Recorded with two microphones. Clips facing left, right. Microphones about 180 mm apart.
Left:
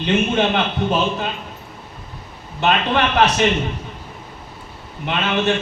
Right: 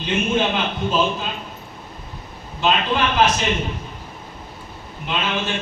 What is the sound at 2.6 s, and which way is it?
Speech, 65° left (ahead or behind).